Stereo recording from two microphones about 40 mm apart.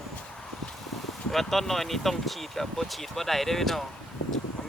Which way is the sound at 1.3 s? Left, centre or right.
Centre.